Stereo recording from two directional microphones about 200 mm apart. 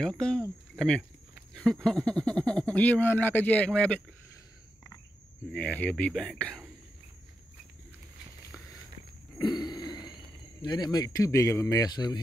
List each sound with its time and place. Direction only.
0.0 s speech: 5° left (ahead or behind)
5.5 s speech: 5° left (ahead or behind)
9.4 s a sound: 25° left (ahead or behind)
10.6 s speech: 20° left (ahead or behind)